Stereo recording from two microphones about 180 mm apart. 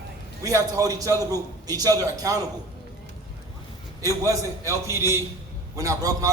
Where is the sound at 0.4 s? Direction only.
20° right (ahead or behind).